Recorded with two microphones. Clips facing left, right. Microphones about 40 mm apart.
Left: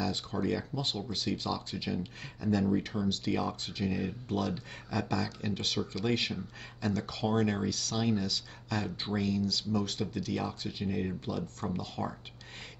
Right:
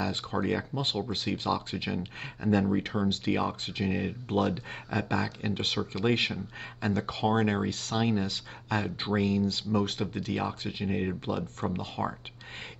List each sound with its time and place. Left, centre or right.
0.0 s speech: right